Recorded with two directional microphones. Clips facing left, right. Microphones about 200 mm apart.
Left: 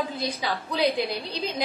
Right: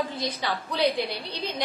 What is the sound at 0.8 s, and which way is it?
Speech, 30° left (ahead or behind).